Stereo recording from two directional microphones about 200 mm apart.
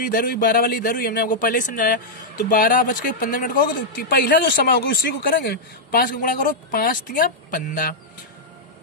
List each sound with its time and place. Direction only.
0.0 s a man's voice: 45° left (ahead or behind)